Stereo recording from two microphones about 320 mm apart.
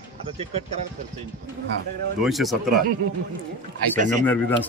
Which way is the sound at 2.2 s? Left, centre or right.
Centre.